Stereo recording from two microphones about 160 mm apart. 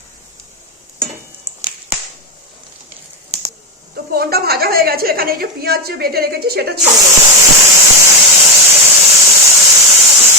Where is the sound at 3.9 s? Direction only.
75° right (ahead or behind).